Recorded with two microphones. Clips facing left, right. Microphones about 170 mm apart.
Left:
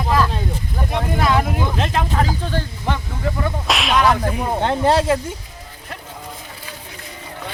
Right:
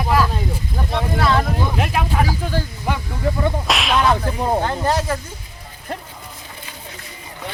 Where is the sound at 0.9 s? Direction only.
15° left (ahead or behind).